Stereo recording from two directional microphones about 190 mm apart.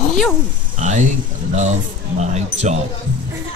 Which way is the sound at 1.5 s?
35° right (ahead or behind).